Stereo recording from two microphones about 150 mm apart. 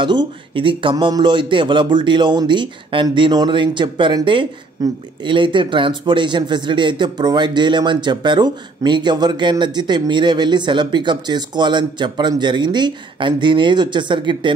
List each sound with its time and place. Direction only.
0.0 s a man's voice: 30° right (ahead or behind)